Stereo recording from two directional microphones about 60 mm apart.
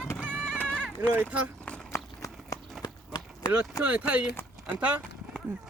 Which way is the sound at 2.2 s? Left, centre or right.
Left.